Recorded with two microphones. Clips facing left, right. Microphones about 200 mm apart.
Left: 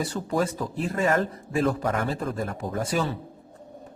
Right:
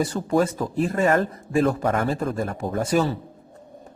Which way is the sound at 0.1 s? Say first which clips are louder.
Right 3 dB; 45° right (ahead or behind).